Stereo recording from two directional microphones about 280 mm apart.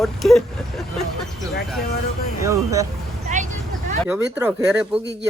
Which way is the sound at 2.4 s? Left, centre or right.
Centre.